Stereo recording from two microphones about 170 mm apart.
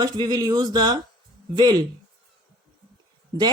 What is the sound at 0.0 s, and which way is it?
Speech, 25° right (ahead or behind).